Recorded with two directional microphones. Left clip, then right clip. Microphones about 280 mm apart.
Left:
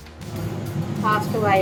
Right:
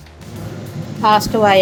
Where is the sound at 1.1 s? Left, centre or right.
Right.